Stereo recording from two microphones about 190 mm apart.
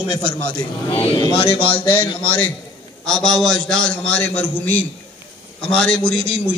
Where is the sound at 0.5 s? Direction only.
30° left (ahead or behind).